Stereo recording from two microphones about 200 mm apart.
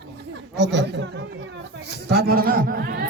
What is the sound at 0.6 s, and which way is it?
Speech, 60° right (ahead or behind).